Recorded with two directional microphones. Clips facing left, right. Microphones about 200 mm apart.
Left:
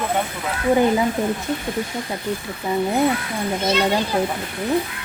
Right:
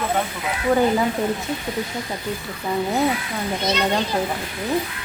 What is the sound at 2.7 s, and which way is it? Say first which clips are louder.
Speech: left 2 dB; 20° left (ahead or behind).